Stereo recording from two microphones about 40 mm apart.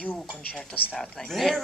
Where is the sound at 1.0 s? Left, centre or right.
Centre.